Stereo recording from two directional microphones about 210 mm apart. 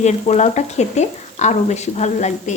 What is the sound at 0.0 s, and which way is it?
Speech, 35° left (ahead or behind).